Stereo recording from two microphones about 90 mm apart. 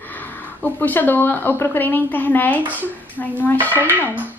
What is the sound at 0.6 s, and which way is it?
A woman's voice, 20° left (ahead or behind).